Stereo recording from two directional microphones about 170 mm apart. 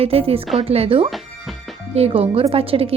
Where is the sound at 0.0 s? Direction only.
35° right (ahead or behind).